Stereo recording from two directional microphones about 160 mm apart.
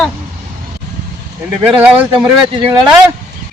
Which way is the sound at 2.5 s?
30° right (ahead or behind).